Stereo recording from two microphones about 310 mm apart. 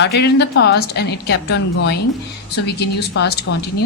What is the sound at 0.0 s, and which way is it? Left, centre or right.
Speech, left.